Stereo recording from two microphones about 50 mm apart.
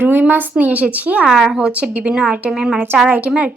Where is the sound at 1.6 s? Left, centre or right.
Right.